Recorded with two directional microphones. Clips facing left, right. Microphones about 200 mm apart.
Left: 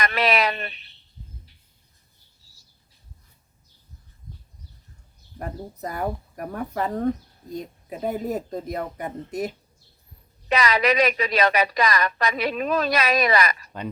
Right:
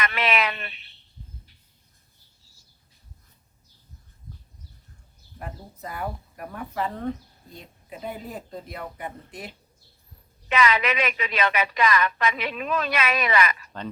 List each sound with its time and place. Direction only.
0.0 s a woman's voice: 40° left (ahead or behind)
5.4 s a woman's voice: 40° left (ahead or behind)